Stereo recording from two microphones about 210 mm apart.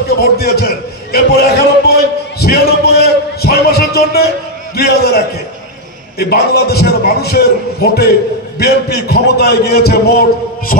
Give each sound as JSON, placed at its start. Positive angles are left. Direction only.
{"t": 0.2, "sound": "a man's voice", "side_deg": 50}
{"t": 10.7, "sound": "heart murmur", "side_deg": 40}